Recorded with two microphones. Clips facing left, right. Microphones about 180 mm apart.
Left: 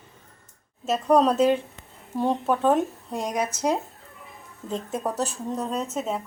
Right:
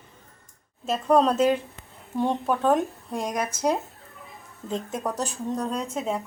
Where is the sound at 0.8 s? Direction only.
Centre (ahead or behind).